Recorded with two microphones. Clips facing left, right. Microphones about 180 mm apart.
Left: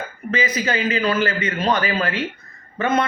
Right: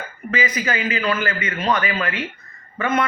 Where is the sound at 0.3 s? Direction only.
30° left (ahead or behind).